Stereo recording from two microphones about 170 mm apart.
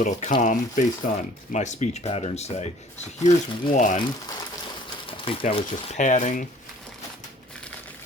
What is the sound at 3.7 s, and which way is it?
Speech, 45° left (ahead or behind).